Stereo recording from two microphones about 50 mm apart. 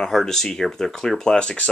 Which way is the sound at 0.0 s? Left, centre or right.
Centre.